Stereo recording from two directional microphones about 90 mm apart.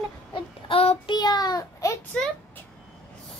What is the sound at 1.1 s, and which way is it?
Speech, 50° left (ahead or behind).